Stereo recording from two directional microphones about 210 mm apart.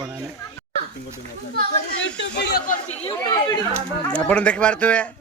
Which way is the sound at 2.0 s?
50° left (ahead or behind).